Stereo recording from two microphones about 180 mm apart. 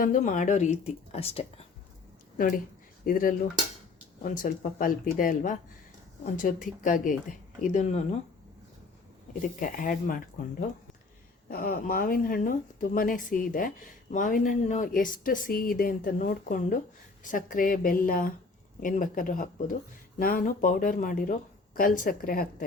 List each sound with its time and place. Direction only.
0.0 s speech: 45° left (ahead or behind)
3.1 s speech: 50° left (ahead or behind)
9.6 s speech: 50° left (ahead or behind)
11.4 s speech: 55° left (ahead or behind)